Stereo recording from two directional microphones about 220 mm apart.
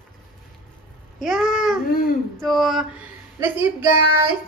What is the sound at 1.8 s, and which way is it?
Speech, 40° left (ahead or behind).